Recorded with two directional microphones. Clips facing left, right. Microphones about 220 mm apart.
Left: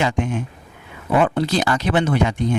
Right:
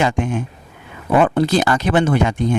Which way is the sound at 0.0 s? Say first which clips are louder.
Right 2 dB; 50° right (ahead or behind).